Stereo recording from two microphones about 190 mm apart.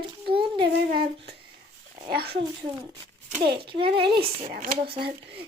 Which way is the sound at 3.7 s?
30° right (ahead or behind).